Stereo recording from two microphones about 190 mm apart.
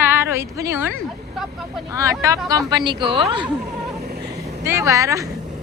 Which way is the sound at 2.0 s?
15° right (ahead or behind).